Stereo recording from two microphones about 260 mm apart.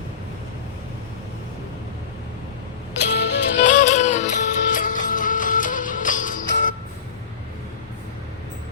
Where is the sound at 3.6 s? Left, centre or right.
Left.